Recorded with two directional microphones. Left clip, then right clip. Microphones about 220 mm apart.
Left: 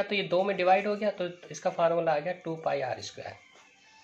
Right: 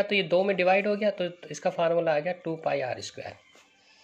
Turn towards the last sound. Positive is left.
turn(degrees=-25)  # may be behind; listen again after turning